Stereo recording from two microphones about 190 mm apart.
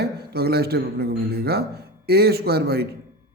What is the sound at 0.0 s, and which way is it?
A man's voice, 55° right (ahead or behind).